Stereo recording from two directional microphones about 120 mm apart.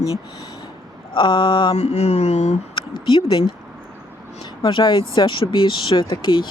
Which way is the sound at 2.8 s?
45° left (ahead or behind).